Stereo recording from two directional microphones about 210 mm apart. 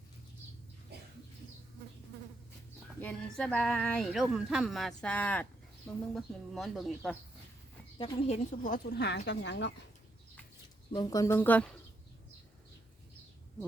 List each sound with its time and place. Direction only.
3.0 s speech: 5° left (ahead or behind)
7.9 s a woman's voice: 20° left (ahead or behind)
8.4 s speech: 40° left (ahead or behind); by 9.7 s 55° left (ahead or behind)
10.9 s speech: 15° left (ahead or behind)